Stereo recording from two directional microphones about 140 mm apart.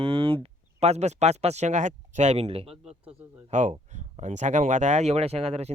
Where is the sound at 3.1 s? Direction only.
60° right (ahead or behind).